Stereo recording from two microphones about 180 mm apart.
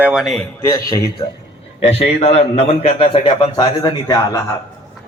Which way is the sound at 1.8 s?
35° left (ahead or behind).